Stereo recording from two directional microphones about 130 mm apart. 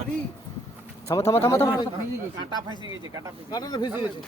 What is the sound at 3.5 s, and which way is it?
Speech, 30° left (ahead or behind).